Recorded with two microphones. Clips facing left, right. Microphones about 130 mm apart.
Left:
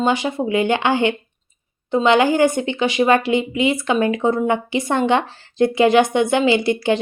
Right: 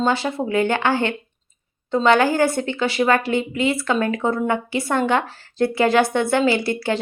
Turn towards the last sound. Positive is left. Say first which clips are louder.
# left 4 dB
turn(degrees=20)  # may be behind; listen again after turning